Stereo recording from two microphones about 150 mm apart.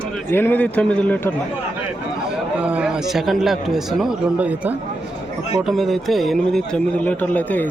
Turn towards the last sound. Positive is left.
turn(degrees=10)  # may be behind; listen again after turning